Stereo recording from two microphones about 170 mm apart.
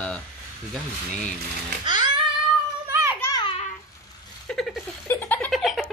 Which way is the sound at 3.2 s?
20° left (ahead or behind).